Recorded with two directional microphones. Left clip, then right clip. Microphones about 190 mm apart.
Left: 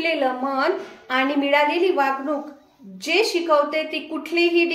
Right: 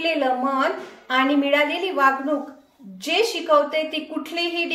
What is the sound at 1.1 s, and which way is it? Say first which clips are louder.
A woman's voice: even; 15° left (ahead or behind).